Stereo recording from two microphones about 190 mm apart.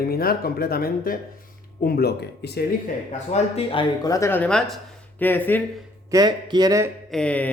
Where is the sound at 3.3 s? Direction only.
30° left (ahead or behind); by 5.6 s 10° left (ahead or behind).